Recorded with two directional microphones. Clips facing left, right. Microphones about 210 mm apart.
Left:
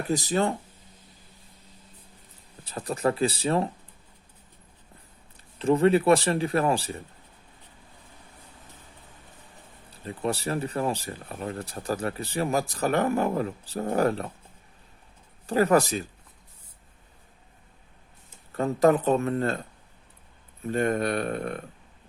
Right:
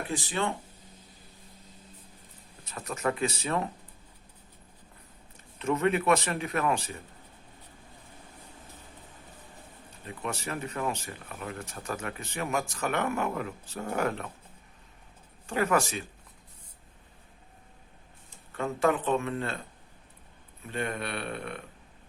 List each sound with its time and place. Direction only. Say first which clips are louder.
0.1 s speech: left 7 dB; 40° left (ahead or behind)
2.6 s speech: left 5 dB; 30° left (ahead or behind)
5.5 s speech: left 6 dB; 30° left (ahead or behind)
9.9 s speech: left 7 dB; 35° left (ahead or behind)
15.4 s speech: left 6 dB; 35° left (ahead or behind)
18.5 s speech: left 6 dB; 40° left (ahead or behind)
20.7 s speech: left 9 dB; 40° left (ahead or behind)